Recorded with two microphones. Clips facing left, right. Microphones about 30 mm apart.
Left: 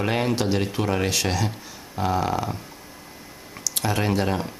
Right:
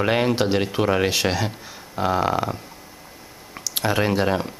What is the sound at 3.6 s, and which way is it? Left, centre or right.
Speech, centre.